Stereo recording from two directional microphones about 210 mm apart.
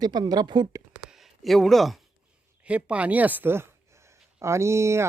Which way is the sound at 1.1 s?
Centre (ahead or behind).